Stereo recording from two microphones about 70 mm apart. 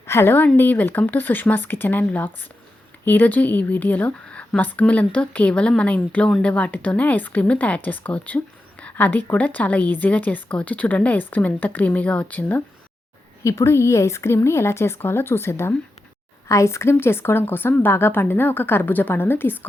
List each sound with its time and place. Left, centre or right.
0.0 s speech: left
0.3 s speech: left
8.8 s a sound: left
9.3 s speech: left
13.4 s a woman's voice: left